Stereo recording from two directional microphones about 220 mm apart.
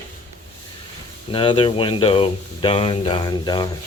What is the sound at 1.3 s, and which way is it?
Speech, 25° left (ahead or behind).